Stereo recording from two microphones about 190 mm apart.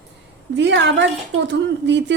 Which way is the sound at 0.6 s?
65° right (ahead or behind).